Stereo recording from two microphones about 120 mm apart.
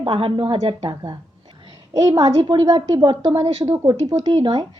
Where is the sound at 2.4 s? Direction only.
50° right (ahead or behind).